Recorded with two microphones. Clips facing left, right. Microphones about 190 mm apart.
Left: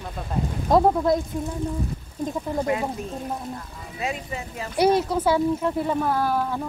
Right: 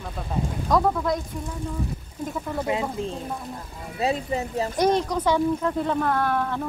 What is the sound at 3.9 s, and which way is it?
Speech, 35° right (ahead or behind).